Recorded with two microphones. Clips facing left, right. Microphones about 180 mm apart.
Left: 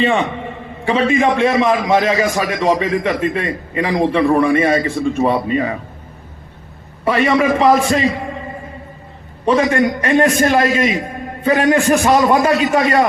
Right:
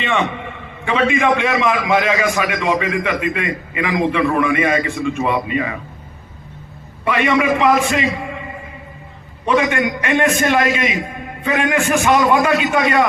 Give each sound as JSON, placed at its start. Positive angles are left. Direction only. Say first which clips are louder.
{"t": 0.0, "sound": "a man's voice", "louder": "left 4 dB", "side_deg": 35}
{"t": 7.0, "sound": "a man's voice", "louder": "left 2 dB", "side_deg": 35}
{"t": 9.5, "sound": "a man's voice", "louder": "left 3 dB", "side_deg": 35}